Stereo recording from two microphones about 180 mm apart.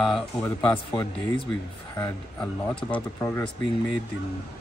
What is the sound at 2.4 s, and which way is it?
A woman's voice, 5° left (ahead or behind).